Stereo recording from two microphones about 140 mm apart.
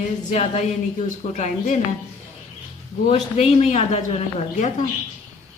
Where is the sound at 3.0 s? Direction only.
50° left (ahead or behind).